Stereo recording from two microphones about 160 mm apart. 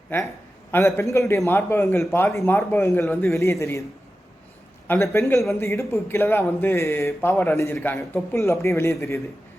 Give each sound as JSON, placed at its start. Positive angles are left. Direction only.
{"t": 0.1, "sound": "a man's voice", "side_deg": 15}
{"t": 5.1, "sound": "a man's voice", "side_deg": 15}